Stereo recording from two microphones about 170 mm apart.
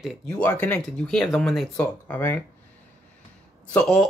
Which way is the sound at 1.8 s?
15° left (ahead or behind).